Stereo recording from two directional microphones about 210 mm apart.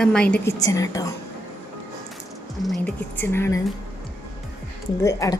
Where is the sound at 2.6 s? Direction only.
5° left (ahead or behind).